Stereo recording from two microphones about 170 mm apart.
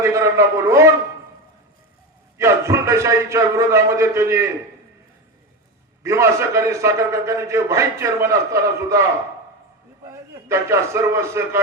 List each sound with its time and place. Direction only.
0.0 s a man's voice: 15° right (ahead or behind)
2.4 s a man's voice: 15° right (ahead or behind)
6.0 s a man's voice: 15° right (ahead or behind)
10.1 s a man's voice: 15° right (ahead or behind)